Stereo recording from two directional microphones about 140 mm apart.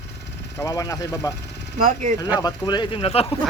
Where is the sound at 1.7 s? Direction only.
70° right (ahead or behind).